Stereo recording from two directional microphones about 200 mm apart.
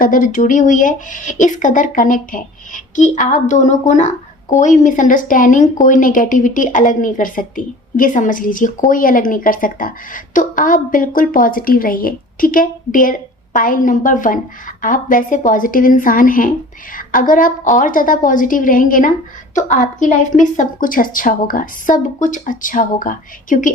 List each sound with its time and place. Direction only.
0.0 s a woman's voice: 40° left (ahead or behind)